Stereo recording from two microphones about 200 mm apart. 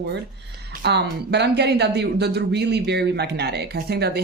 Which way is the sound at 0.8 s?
55° right (ahead or behind).